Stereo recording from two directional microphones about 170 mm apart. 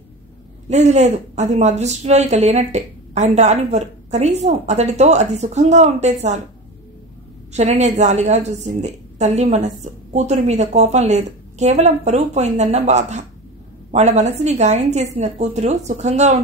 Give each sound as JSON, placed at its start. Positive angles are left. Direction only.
{"t": 0.7, "sound": "a woman's voice", "side_deg": -40}
{"t": 7.5, "sound": "a woman's voice", "side_deg": -40}